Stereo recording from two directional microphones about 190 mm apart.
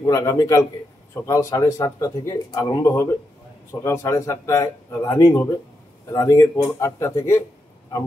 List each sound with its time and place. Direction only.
0.0 s speech: 20° left (ahead or behind)